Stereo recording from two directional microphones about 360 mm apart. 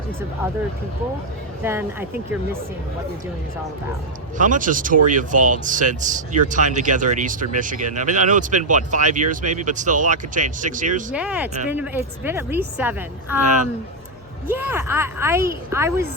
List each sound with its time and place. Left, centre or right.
1.6 s speech: centre
4.4 s speech: right
11.1 s a woman's voice: centre
14.4 s speech: centre